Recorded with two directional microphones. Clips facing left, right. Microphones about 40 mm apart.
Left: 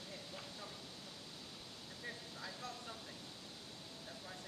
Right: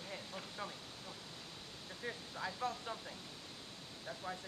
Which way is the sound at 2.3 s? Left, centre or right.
Right.